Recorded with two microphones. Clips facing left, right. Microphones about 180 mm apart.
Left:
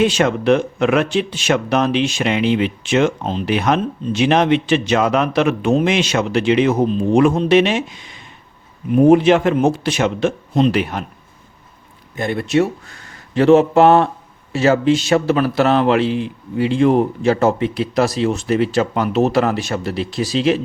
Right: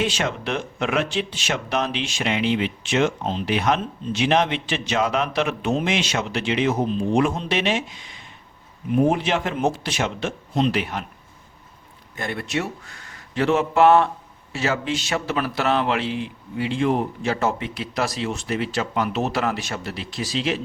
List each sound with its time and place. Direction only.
0.0 s speech: 55° left (ahead or behind)
9.0 s speech: 60° left (ahead or behind)
12.1 s speech: 20° left (ahead or behind); by 20.6 s 35° left (ahead or behind)